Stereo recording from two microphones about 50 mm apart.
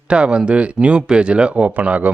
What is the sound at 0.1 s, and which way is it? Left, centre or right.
Speech, right.